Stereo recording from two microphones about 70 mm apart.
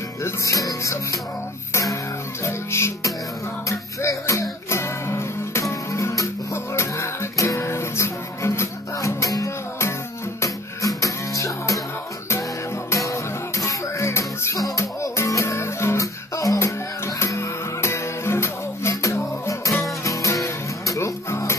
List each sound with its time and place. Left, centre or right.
0.2 s music: left
1.7 s throat clearing: left
2.4 s music: left
4.3 s music: left
12.9 s music: left